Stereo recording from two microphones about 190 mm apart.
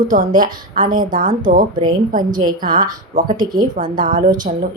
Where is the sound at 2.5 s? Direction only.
45° right (ahead or behind).